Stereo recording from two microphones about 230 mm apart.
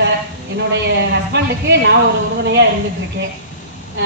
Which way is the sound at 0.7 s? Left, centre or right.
Right.